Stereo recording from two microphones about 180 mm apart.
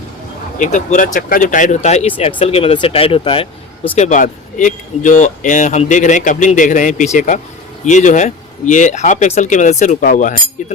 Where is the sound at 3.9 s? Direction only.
40° left (ahead or behind).